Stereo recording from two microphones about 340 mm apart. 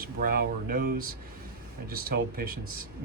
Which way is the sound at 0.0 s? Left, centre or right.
Right.